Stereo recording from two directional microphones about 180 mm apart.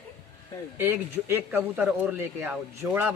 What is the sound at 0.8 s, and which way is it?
Speech, 10° right (ahead or behind).